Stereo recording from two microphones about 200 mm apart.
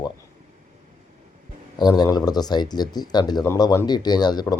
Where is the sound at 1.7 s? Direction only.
20° left (ahead or behind).